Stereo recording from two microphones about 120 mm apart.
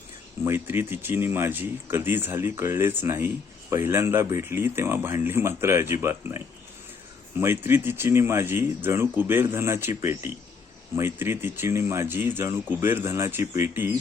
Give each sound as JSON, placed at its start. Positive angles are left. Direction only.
{"t": 0.4, "sound": "speech", "side_deg": -20}